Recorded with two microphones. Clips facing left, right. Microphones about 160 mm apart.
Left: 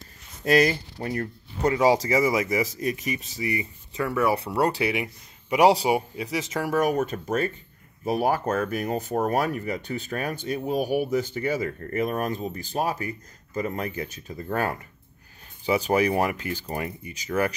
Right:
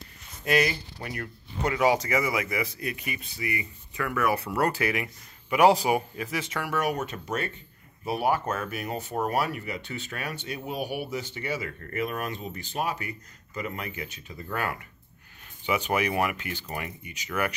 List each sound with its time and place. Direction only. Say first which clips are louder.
0.5 s speech: left 5 dB; 40° left (ahead or behind)
3.9 s speech: left 3 dB; 20° left (ahead or behind)
6.2 s speech: left 4 dB; 35° left (ahead or behind)